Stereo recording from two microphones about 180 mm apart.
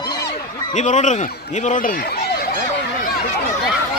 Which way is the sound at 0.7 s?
45° left (ahead or behind).